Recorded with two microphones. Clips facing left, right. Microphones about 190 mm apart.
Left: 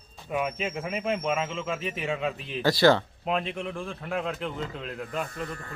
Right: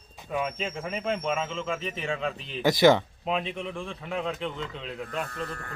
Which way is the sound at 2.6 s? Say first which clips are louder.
Right 1 dB; 15° right (ahead or behind).